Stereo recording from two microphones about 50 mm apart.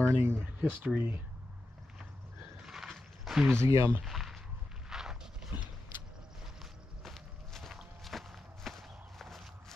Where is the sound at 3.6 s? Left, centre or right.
Right.